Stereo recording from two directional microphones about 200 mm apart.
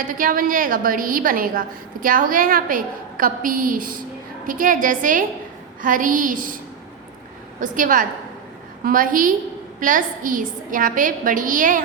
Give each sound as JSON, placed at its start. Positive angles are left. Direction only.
{"t": 0.1, "sound": "a woman's voice", "side_deg": -45}
{"t": 7.6, "sound": "a woman's voice", "side_deg": -40}